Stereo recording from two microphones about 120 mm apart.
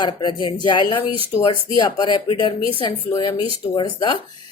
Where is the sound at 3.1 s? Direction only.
35° left (ahead or behind).